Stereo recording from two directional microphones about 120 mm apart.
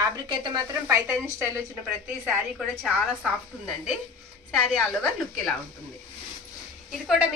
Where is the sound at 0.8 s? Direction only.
25° right (ahead or behind).